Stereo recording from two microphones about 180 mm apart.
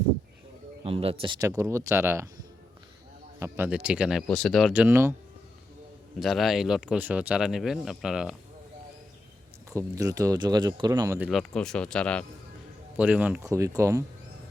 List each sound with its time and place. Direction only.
0.9 s speech: 30° right (ahead or behind)
1.5 s speech: 15° right (ahead or behind)
3.4 s speech: 10° right (ahead or behind)
6.1 s speech: centre (ahead or behind)
9.6 s speech: 20° right (ahead or behind)
11.3 s speech: centre (ahead or behind)
13.0 s speech: 10° right (ahead or behind)